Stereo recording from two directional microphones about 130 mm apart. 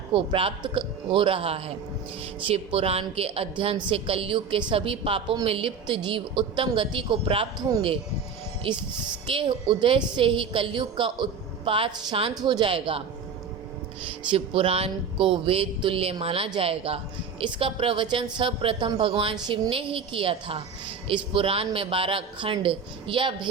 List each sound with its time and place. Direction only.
0.1 s a man's voice: 40° right (ahead or behind)
2.7 s a man's voice: 50° right (ahead or behind)
9.2 s a woman's voice: 40° right (ahead or behind)
14.3 s a man's voice: 45° right (ahead or behind)